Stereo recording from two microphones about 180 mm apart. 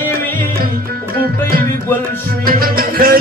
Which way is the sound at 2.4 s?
55° right (ahead or behind).